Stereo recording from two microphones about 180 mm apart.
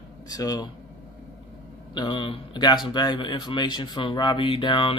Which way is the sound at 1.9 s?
25° left (ahead or behind).